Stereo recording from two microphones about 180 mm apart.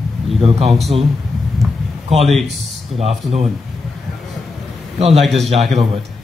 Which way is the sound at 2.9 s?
35° right (ahead or behind).